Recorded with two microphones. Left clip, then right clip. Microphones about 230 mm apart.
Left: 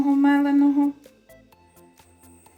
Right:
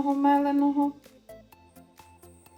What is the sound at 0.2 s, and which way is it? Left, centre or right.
Humming, left.